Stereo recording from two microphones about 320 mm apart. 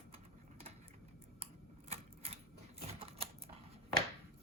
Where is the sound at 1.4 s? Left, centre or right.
Centre.